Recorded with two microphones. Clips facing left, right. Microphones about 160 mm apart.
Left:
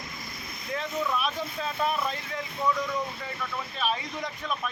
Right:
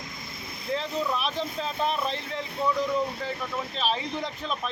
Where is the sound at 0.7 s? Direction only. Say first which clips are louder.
Right 2 dB; 30° right (ahead or behind).